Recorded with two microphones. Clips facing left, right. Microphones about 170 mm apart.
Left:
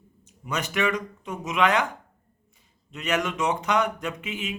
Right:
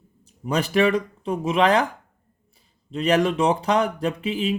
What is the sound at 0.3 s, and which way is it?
Speech, 35° right (ahead or behind).